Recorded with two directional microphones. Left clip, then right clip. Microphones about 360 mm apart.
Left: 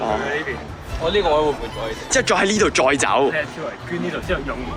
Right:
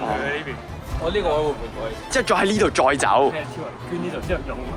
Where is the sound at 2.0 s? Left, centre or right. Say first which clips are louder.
Left 2 dB; centre.